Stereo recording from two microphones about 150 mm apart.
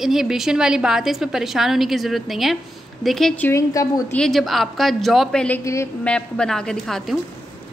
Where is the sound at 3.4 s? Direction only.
20° left (ahead or behind).